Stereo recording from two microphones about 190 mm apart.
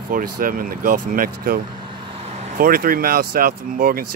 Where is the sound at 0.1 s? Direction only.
50° right (ahead or behind).